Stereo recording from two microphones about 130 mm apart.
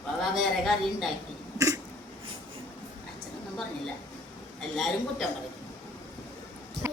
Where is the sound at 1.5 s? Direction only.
25° right (ahead or behind).